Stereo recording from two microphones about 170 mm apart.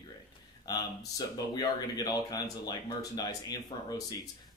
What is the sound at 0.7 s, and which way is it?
Speech, 25° left (ahead or behind).